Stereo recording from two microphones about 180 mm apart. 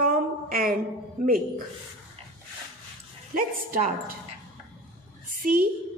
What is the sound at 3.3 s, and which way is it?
Speech, 50° right (ahead or behind).